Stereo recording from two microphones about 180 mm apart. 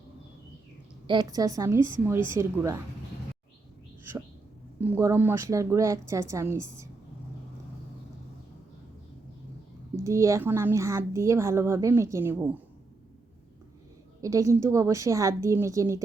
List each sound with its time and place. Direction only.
1.0 s a woman's voice: 25° right (ahead or behind)
4.8 s speech: 15° right (ahead or behind)
9.9 s speech: 15° right (ahead or behind)
14.2 s speech: 20° right (ahead or behind)